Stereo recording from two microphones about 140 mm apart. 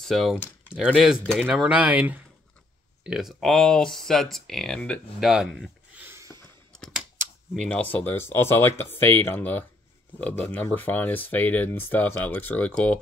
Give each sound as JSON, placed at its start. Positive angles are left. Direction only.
{"t": 0.0, "sound": "speech", "side_deg": 0}
{"t": 5.9, "sound": "a sound", "side_deg": -15}
{"t": 7.6, "sound": "speech", "side_deg": 10}